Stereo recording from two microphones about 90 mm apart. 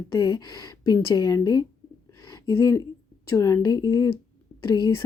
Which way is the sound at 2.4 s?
35° left (ahead or behind).